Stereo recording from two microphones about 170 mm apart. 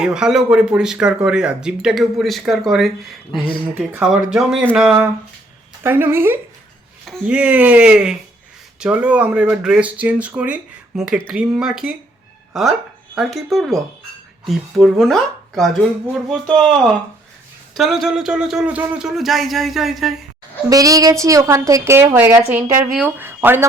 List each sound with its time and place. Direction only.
0.0 s speech: 5° right (ahead or behind)
7.0 s speech: centre (ahead or behind)
13.1 s speech: centre (ahead or behind)
17.7 s speech: centre (ahead or behind)
20.7 s a woman's voice: 20° right (ahead or behind)